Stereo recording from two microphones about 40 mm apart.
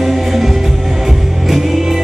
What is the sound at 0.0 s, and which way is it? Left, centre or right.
Music, centre.